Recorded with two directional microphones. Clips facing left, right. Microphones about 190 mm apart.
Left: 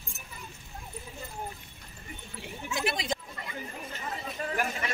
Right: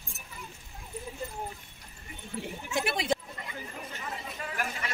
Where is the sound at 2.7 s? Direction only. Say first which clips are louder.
Right 1 dB; 60° right (ahead or behind).